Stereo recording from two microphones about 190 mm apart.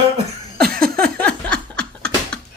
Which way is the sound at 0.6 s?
55° right (ahead or behind).